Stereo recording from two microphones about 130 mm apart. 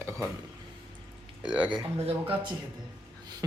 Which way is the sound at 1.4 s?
10° right (ahead or behind).